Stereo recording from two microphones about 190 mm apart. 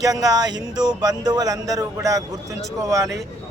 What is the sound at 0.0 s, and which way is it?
Speech, 20° right (ahead or behind).